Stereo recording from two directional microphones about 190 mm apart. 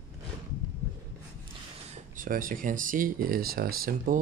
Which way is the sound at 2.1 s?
45° right (ahead or behind).